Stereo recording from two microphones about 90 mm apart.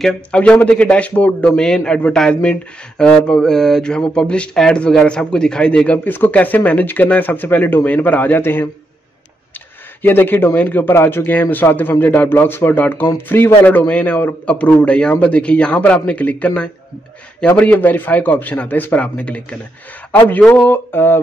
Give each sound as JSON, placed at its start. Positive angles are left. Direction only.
{"t": 0.0, "sound": "speech", "side_deg": 10}
{"t": 6.0, "sound": "speech", "side_deg": 20}
{"t": 10.0, "sound": "speech", "side_deg": 20}